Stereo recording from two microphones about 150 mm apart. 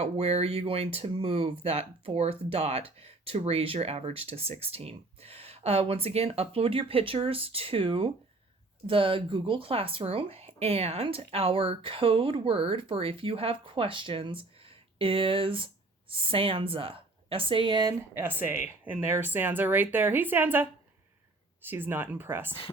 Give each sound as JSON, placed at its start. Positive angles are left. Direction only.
{"t": 0.0, "sound": "speech", "side_deg": -45}
{"t": 18.2, "sound": "speech", "side_deg": -15}